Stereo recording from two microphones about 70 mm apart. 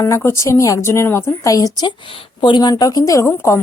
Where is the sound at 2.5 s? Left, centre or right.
Left.